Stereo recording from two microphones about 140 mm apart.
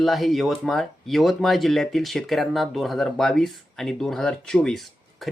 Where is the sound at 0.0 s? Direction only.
Centre (ahead or behind).